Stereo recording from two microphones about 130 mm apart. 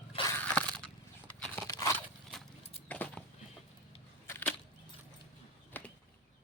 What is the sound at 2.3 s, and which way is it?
Horse, centre (ahead or behind).